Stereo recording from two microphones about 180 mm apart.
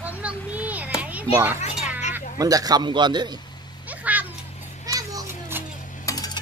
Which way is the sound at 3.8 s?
10° right (ahead or behind).